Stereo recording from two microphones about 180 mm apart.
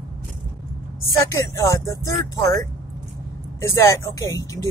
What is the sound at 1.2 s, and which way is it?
Speech, 15° left (ahead or behind).